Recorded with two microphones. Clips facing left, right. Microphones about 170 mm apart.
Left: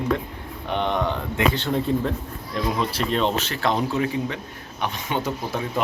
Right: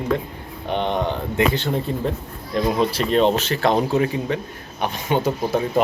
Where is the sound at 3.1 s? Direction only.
35° right (ahead or behind).